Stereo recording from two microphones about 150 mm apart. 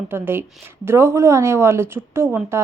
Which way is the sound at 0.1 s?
15° right (ahead or behind).